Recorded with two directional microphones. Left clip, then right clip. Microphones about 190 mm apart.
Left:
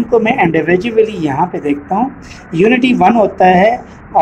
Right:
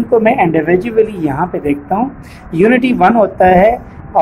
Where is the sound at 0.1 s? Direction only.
Centre (ahead or behind).